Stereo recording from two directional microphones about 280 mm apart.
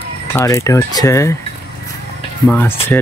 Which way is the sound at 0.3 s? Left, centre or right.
Centre.